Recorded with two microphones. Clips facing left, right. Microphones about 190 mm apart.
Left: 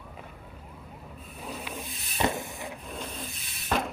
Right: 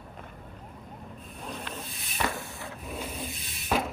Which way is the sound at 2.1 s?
20° left (ahead or behind).